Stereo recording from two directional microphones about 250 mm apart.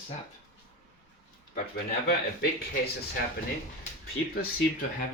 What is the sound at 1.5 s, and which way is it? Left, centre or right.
Speech, left.